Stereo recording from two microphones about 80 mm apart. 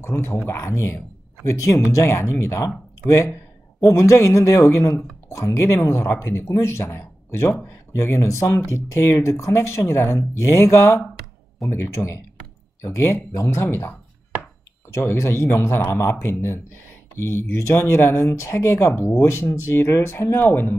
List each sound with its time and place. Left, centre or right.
0.0 s speech: left
3.9 s speech: left